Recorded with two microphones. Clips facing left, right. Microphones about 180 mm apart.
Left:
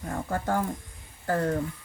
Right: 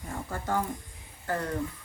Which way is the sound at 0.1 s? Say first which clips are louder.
Left 3 dB; 50° left (ahead or behind).